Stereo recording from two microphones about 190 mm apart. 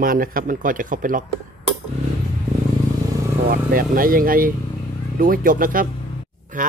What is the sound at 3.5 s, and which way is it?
Speech, 50° right (ahead or behind).